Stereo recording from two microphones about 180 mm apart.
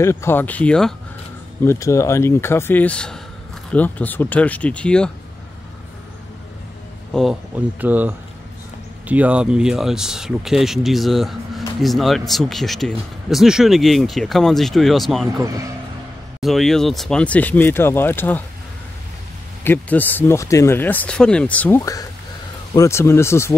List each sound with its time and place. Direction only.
0.0 s speech: 15° left (ahead or behind)
1.6 s speech: 15° left (ahead or behind)
7.2 s speech: 5° right (ahead or behind)
15.4 s speech: 20° right (ahead or behind)
16.3 s speech: centre (ahead or behind)
19.6 s speech: 10° left (ahead or behind)